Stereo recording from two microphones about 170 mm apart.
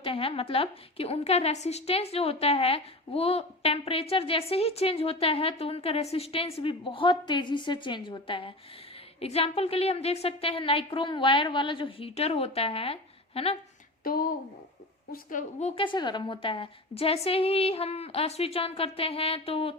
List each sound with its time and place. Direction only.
0.0 s a woman's voice: 30° left (ahead or behind)
14.0 s a woman's voice: 60° left (ahead or behind); by 19.7 s 35° left (ahead or behind)